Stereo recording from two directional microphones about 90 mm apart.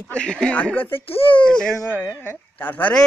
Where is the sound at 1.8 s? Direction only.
25° left (ahead or behind).